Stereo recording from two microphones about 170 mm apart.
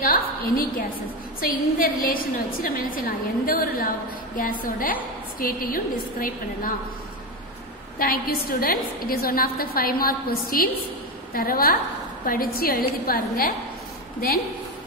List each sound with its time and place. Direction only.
0.0 s a woman's voice: 55° left (ahead or behind)
8.0 s a woman's voice: 60° left (ahead or behind)